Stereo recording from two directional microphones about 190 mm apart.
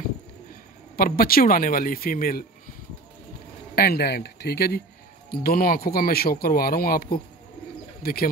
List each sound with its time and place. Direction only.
0.9 s speech: 50° left (ahead or behind)
3.7 s speech: 55° left (ahead or behind)